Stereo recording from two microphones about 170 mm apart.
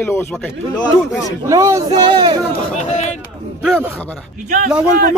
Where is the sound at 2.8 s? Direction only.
45° left (ahead or behind).